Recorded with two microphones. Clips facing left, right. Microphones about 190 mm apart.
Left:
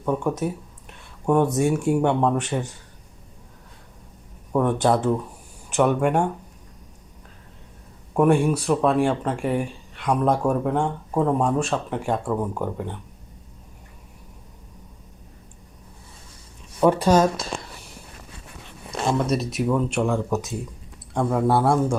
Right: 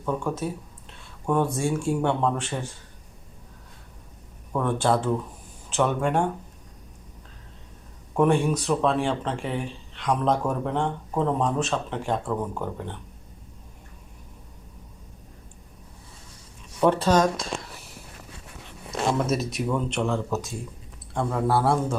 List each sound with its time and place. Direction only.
0.0 s speech: 20° left (ahead or behind)
4.5 s speech: 15° left (ahead or behind)
8.1 s speech: 10° left (ahead or behind)
16.8 s speech: 10° left (ahead or behind)
18.9 s speech: 5° right (ahead or behind); by 21.9 s 15° left (ahead or behind)